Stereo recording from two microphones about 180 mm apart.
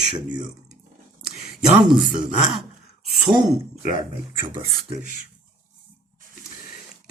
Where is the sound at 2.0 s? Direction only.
45° right (ahead or behind).